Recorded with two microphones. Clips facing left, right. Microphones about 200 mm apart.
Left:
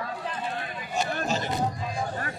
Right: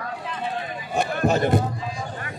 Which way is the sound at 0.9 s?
60° right (ahead or behind).